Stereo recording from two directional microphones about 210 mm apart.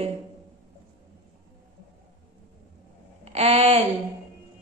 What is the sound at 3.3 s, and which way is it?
Speech, 30° right (ahead or behind).